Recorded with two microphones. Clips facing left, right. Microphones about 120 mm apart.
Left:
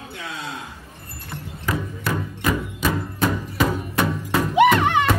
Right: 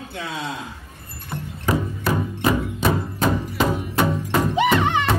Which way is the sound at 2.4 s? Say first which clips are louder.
Right 3 dB; 25° right (ahead or behind).